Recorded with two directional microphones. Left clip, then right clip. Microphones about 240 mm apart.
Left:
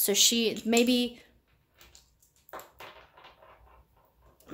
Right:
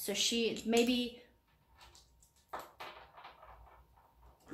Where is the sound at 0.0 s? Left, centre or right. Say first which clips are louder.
Left 9 dB; left.